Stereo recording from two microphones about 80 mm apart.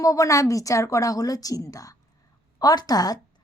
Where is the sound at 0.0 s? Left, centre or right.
Left.